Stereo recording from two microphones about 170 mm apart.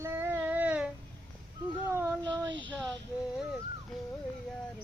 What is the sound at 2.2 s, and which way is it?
Speech, 25° right (ahead or behind).